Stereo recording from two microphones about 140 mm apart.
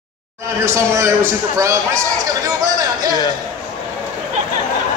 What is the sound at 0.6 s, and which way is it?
A man's voice, 20° right (ahead or behind).